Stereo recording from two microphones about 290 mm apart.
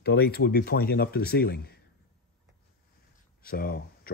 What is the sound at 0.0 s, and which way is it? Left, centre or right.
Speech, left.